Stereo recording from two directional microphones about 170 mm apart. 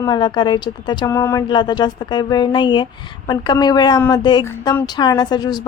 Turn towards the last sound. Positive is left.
turn(degrees=25)  # may be behind; listen again after turning